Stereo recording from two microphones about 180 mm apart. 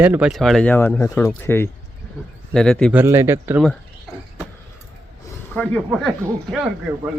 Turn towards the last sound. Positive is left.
turn(degrees=-5)  # may be behind; listen again after turning